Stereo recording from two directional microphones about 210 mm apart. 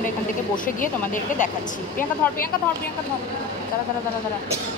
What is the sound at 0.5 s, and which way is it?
Speech, 40° left (ahead or behind).